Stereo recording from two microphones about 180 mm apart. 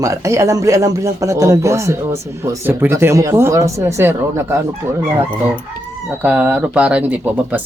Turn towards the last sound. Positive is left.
turn(degrees=-5)  # may be behind; listen again after turning